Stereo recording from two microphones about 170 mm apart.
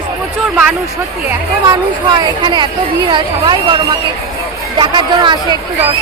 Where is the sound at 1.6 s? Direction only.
25° right (ahead or behind).